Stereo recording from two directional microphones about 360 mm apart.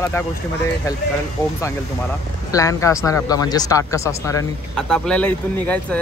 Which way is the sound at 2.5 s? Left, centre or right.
Centre.